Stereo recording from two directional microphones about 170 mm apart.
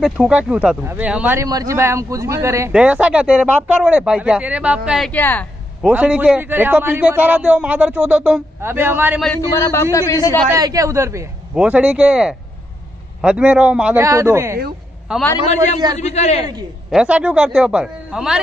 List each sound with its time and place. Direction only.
0.0 s a man's voice: 5° right (ahead or behind)
2.7 s a man's voice: 5° right (ahead or behind)
5.1 s speech: 10° left (ahead or behind)
5.8 s a man's voice: 5° right (ahead or behind)
9.6 s speech: 20° left (ahead or behind)
10.5 s a man's voice: 20° right (ahead or behind)
11.5 s a man's voice: 5° right (ahead or behind)
15.4 s a man's voice: 45° left (ahead or behind)
16.9 s speech: 5° right (ahead or behind)